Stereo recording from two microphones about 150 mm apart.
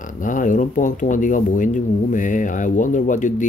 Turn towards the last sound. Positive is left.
turn(degrees=55)  # may be behind; listen again after turning